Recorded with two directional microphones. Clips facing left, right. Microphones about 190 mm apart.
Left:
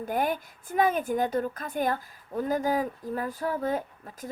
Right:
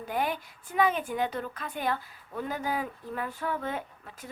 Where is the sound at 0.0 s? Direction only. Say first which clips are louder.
Left 3 dB; 45° left (ahead or behind).